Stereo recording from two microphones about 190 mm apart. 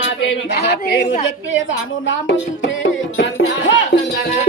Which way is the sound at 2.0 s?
80° left.